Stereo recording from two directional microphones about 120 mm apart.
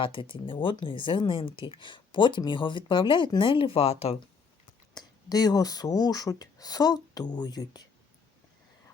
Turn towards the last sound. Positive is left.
turn(degrees=35)  # may be behind; listen again after turning